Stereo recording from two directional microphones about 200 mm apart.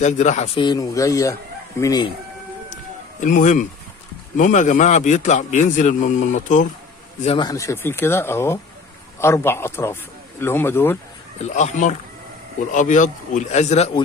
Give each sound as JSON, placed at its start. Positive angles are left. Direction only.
{"t": 0.0, "sound": "a man's voice", "side_deg": 35}
{"t": 2.7, "sound": "a sound", "side_deg": 40}
{"t": 4.4, "sound": "a man's voice", "side_deg": 40}
{"t": 7.2, "sound": "speech", "side_deg": 25}
{"t": 11.3, "sound": "a man's voice", "side_deg": 35}